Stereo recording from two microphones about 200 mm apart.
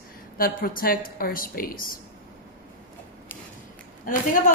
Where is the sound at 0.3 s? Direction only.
45° left (ahead or behind).